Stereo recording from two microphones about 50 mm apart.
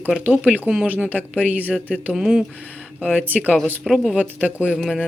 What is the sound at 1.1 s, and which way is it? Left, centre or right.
Speech, right.